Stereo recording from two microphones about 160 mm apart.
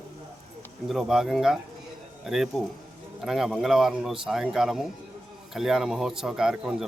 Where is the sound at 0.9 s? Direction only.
Centre (ahead or behind).